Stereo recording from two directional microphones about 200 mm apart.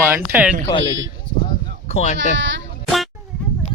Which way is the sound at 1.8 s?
35° left (ahead or behind).